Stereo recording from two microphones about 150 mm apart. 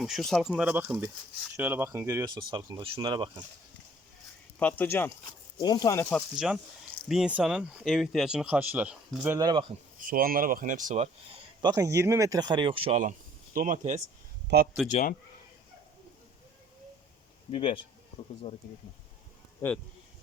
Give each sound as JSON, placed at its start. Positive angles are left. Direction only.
{"t": 0.0, "sound": "speech", "side_deg": 0}
{"t": 4.6, "sound": "speech", "side_deg": 10}
{"t": 5.2, "sound": "speech", "side_deg": 30}
{"t": 6.3, "sound": "speech", "side_deg": -5}
{"t": 9.4, "sound": "speech", "side_deg": -30}
{"t": 10.0, "sound": "speech", "side_deg": -70}
{"t": 11.6, "sound": "speech", "side_deg": -25}
{"t": 13.0, "sound": "speech", "side_deg": -60}
{"t": 17.5, "sound": "speech", "side_deg": 35}
{"t": 18.4, "sound": "speech", "side_deg": 50}